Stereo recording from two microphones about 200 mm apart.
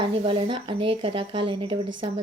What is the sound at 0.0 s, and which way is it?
Speech, 25° right (ahead or behind).